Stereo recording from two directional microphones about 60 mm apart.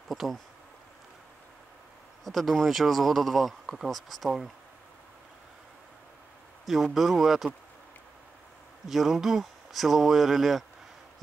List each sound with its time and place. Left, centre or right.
0.1 s speech: centre
2.2 s speech: centre
6.7 s speech: centre
8.8 s speech: centre